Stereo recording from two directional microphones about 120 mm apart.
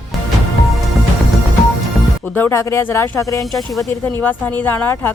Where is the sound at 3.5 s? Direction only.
Centre (ahead or behind).